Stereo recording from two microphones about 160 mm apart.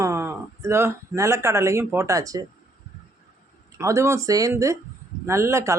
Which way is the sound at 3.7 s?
15° right (ahead or behind).